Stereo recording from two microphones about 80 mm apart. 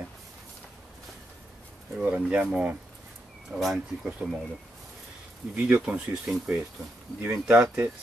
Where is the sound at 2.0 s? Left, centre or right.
Centre.